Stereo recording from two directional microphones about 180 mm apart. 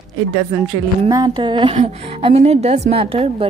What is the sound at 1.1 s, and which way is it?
A woman's voice, 20° right (ahead or behind).